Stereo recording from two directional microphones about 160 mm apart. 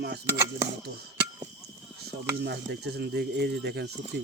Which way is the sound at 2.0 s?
90° right.